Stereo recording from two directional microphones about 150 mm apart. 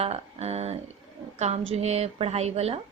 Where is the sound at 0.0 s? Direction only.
45° right (ahead or behind).